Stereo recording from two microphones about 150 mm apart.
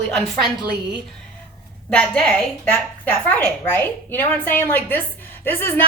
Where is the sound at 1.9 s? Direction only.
5° left (ahead or behind).